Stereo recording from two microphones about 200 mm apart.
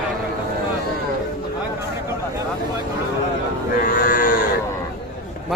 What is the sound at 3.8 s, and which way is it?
Cattle, 45° left (ahead or behind).